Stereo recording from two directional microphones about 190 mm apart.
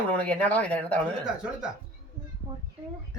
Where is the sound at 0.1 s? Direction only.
5° left (ahead or behind).